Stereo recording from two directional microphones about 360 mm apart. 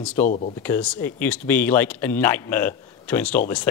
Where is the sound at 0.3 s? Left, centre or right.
Left.